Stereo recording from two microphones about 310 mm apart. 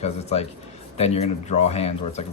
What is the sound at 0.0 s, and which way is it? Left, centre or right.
Speech, left.